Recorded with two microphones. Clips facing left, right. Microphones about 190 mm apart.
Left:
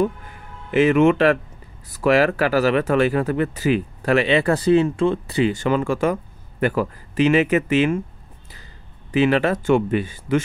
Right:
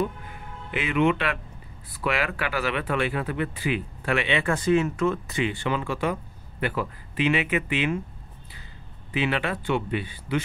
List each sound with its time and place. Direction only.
0.7 s speech: 40° left (ahead or behind)
9.1 s speech: 40° left (ahead or behind)